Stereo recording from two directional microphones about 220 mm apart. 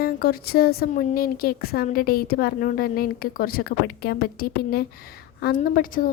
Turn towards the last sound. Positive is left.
turn(degrees=40)  # may be behind; listen again after turning